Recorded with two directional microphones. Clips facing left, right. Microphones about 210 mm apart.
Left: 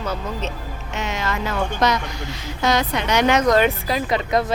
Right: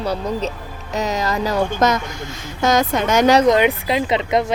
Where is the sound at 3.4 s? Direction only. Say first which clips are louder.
Right 2 dB; 20° right (ahead or behind).